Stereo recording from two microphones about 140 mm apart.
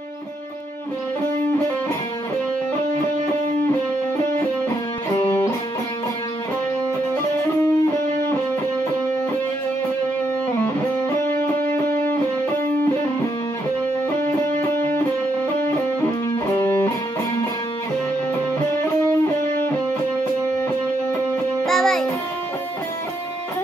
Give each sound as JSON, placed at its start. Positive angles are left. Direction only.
{"t": 10.6, "sound": "music", "side_deg": 10}
{"t": 14.6, "sound": "music", "side_deg": 15}
{"t": 21.6, "sound": "music", "side_deg": 0}